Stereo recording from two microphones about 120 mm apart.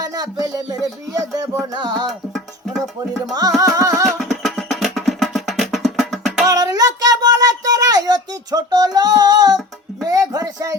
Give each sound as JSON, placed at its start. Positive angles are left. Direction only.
{"t": 0.0, "sound": "speech", "side_deg": -30}
{"t": 1.7, "sound": "music", "side_deg": -35}
{"t": 2.0, "sound": "music", "side_deg": 0}
{"t": 3.6, "sound": "music", "side_deg": -30}
{"t": 4.0, "sound": "music", "side_deg": 0}
{"t": 6.4, "sound": "a sound", "side_deg": -30}